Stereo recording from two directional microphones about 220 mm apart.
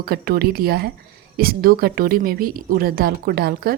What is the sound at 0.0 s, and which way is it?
Speech, 45° right (ahead or behind).